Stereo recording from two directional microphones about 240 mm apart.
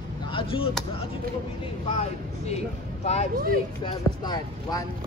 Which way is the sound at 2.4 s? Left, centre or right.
Left.